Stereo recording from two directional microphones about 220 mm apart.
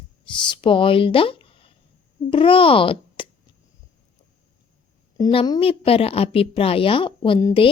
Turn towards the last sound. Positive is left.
turn(degrees=20)  # may be behind; listen again after turning